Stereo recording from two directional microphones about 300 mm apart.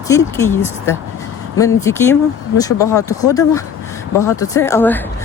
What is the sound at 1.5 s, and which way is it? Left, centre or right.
Speech, centre.